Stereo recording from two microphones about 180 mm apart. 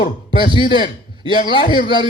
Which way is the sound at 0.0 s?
30° left (ahead or behind).